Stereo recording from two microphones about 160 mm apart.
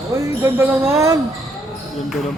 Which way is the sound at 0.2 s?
15° right (ahead or behind).